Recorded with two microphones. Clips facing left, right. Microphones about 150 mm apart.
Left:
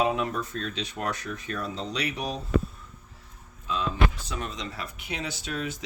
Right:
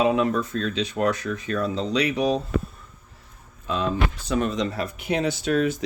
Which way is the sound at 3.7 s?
60° right (ahead or behind).